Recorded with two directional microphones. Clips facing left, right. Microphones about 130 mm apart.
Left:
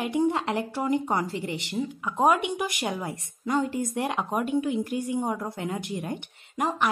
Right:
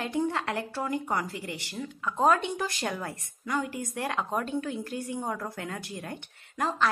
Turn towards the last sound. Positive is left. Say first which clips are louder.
# left 2 dB
turn(degrees=15)  # may be behind; listen again after turning